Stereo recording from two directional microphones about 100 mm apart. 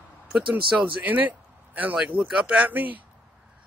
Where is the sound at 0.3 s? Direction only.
15° right (ahead or behind).